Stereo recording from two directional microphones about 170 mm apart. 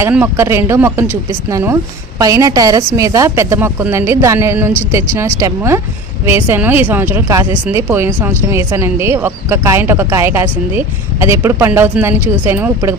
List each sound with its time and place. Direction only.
0.1 s speech: 15° right (ahead or behind)